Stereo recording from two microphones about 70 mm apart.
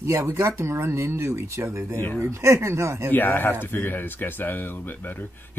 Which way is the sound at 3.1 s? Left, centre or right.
Left.